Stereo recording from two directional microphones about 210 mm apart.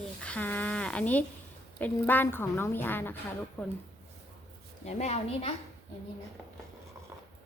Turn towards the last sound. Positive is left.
turn(degrees=30)  # may be behind; listen again after turning